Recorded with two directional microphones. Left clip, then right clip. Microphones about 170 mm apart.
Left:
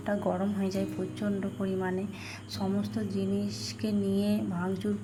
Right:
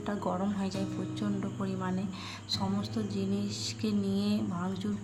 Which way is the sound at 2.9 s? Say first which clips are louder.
Left 2 dB; 10° left (ahead or behind).